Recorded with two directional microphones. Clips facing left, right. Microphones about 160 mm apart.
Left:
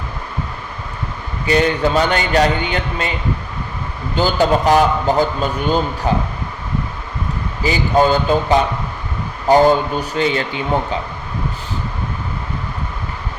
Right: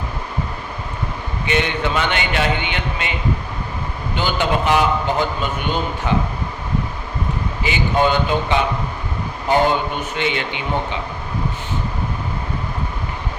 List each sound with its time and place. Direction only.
1.5 s a man's voice: 35° left (ahead or behind)
7.6 s a man's voice: 35° left (ahead or behind)